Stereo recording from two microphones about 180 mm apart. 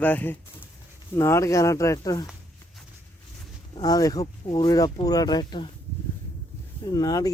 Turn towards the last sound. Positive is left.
turn(degrees=20)  # may be behind; listen again after turning